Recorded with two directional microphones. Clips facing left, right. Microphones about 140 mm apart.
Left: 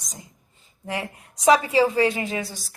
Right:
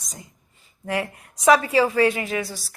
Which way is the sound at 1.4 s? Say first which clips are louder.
Even; 15° left (ahead or behind).